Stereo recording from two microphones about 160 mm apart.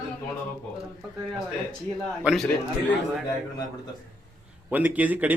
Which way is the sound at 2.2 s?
5° right (ahead or behind).